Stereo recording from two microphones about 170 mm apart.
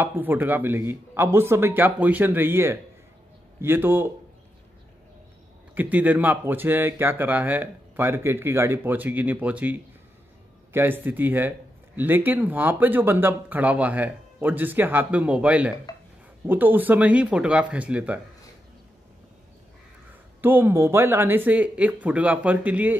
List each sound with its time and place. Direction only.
0.0 s speech: 10° right (ahead or behind)
5.8 s speech: 10° right (ahead or behind)
20.4 s speech: 15° right (ahead or behind)